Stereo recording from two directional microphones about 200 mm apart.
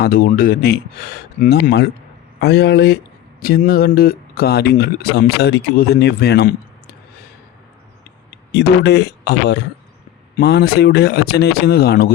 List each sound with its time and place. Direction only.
0.0 s speech: 45° left (ahead or behind)
8.5 s speech: 55° left (ahead or behind)